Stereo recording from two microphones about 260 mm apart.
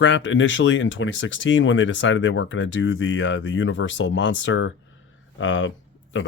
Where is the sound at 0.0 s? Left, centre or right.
Left.